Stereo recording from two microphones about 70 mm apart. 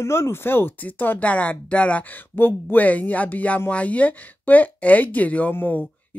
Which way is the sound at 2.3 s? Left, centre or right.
Left.